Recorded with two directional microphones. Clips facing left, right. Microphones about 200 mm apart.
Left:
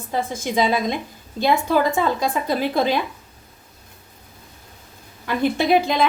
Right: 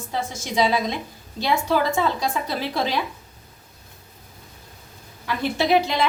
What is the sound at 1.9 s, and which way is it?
Speech, 50° left (ahead or behind).